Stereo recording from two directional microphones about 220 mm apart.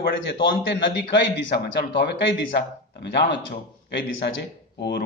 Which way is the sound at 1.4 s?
50° left (ahead or behind).